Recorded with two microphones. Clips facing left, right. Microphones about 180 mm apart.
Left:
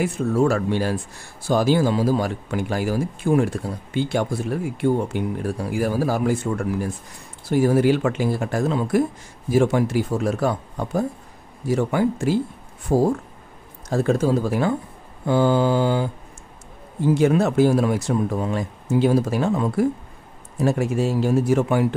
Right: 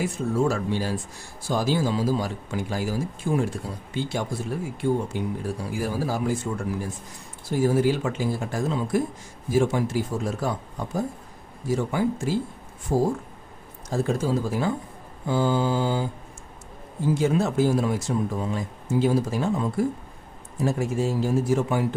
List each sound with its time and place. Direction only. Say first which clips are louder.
0.0 s speech: left 4 dB; 65° left (ahead or behind)
17.1 s speech: left 5 dB; 65° left (ahead or behind)